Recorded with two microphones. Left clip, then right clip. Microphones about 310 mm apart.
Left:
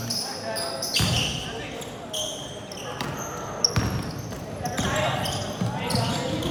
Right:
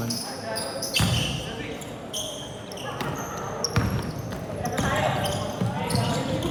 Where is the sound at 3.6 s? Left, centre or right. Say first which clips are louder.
Left 5 dB; right.